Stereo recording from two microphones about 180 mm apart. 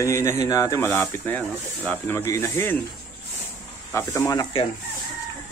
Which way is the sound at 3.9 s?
15° left (ahead or behind).